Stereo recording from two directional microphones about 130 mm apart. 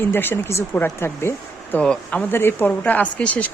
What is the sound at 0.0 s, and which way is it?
Speech, 15° left (ahead or behind).